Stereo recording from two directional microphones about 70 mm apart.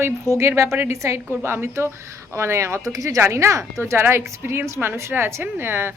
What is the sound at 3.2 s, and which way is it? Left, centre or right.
Speech, right.